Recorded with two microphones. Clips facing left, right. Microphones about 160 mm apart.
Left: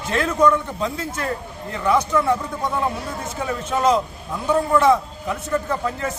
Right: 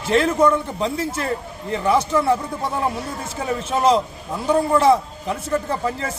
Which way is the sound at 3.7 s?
25° right (ahead or behind).